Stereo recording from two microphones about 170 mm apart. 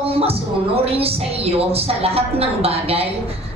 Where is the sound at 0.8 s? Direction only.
35° right (ahead or behind).